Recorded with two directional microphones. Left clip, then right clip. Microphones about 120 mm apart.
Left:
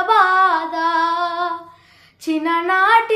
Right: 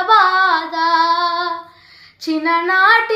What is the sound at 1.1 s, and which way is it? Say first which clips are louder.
Female singing: right 3 dB; 40° left (ahead or behind).